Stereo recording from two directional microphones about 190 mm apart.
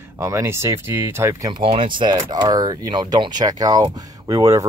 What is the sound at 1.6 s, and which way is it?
Speech, 25° right (ahead or behind).